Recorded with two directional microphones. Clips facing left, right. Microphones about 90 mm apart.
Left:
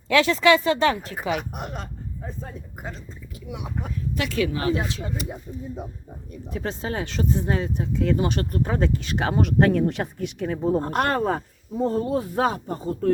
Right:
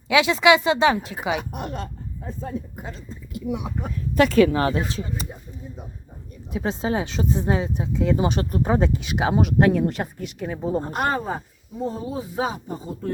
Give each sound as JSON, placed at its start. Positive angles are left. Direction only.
{"t": 0.1, "sound": "speech", "side_deg": -15}
{"t": 3.8, "sound": "speech", "side_deg": -40}
{"t": 6.5, "sound": "speech", "side_deg": -15}
{"t": 11.8, "sound": "speech", "side_deg": 60}